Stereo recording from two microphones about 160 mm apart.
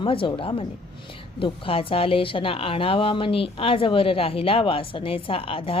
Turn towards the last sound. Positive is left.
turn(degrees=35)  # may be behind; listen again after turning